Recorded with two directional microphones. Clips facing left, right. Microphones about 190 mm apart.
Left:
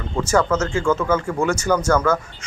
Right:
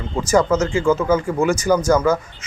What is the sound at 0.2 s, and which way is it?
A man's voice, 10° right (ahead or behind).